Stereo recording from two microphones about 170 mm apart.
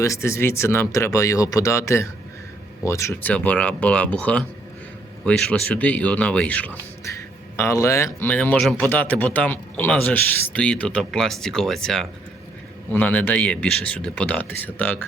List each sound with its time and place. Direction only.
0.0 s speech: 15° left (ahead or behind)